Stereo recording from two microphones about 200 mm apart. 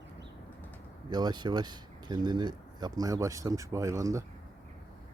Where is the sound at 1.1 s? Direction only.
20° right (ahead or behind).